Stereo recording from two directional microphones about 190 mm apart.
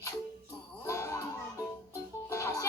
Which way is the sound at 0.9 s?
15° left (ahead or behind).